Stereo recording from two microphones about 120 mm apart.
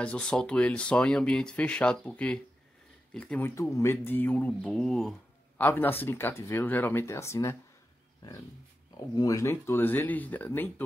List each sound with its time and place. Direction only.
0.0 s speech: 10° left (ahead or behind)
3.4 s speech: 20° left (ahead or behind); by 5.1 s 5° left (ahead or behind)
5.6 s speech: 20° left (ahead or behind)
9.1 s speech: 30° left (ahead or behind)